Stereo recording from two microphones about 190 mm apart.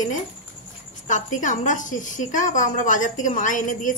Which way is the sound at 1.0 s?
40° left (ahead or behind).